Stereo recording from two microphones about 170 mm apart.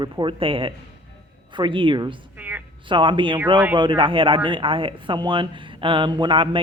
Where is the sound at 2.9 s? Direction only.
30° right (ahead or behind).